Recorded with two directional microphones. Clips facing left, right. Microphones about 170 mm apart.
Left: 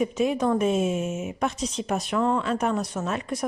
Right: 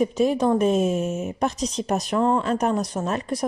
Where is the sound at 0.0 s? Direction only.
35° right (ahead or behind).